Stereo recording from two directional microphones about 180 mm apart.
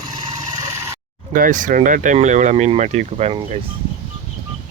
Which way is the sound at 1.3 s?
50° right (ahead or behind).